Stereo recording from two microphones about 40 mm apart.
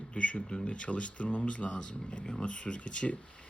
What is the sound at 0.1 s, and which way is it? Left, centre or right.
Speech, left.